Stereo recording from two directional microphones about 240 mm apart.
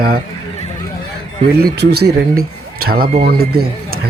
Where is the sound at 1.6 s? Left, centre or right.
Right.